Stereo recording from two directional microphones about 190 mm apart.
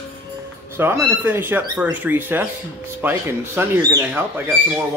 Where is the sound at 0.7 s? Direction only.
15° right (ahead or behind).